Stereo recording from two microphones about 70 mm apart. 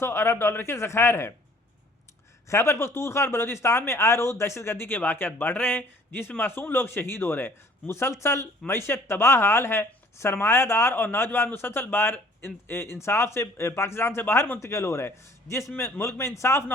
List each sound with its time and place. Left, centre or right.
0.0 s speech: left
2.5 s speech: left